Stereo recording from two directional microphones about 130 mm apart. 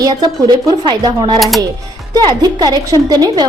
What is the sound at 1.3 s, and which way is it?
Speech, centre (ahead or behind).